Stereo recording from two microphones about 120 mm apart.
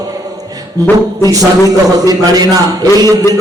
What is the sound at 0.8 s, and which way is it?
Music, 30° right (ahead or behind).